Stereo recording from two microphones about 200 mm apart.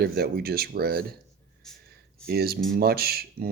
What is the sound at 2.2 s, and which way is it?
Speech, 50° right (ahead or behind).